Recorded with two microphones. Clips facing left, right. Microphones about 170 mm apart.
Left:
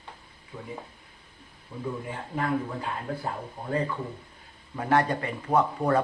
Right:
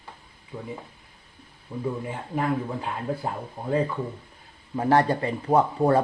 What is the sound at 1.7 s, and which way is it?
Speech, 10° right (ahead or behind).